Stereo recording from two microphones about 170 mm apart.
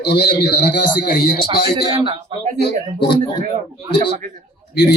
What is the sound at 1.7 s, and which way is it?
Speech, 30° right (ahead or behind).